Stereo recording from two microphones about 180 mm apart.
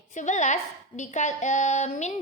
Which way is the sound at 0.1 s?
40° left (ahead or behind).